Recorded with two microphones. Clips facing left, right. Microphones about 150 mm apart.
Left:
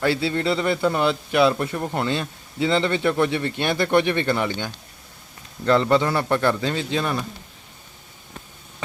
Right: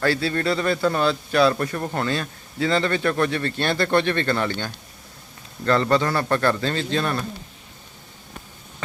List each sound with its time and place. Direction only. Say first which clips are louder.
0.0 s a man's voice: even; 20° left (ahead or behind)